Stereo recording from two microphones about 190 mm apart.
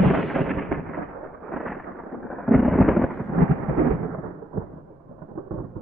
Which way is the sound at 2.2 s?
Centre (ahead or behind).